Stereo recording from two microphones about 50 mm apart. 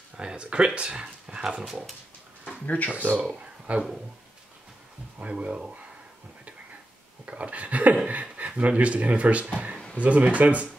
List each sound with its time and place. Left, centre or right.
0.2 s speech: centre
2.6 s speech: left
3.3 s speech: right
5.2 s speech: right
7.2 s speech: right